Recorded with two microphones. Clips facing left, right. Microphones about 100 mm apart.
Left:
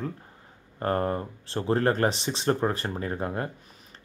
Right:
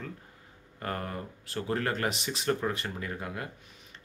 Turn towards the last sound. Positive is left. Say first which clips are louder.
# left 7 dB
turn(degrees=35)  # may be behind; listen again after turning